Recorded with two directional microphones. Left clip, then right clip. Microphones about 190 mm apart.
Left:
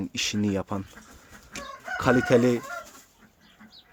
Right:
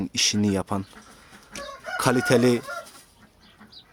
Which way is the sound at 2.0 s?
25° right (ahead or behind).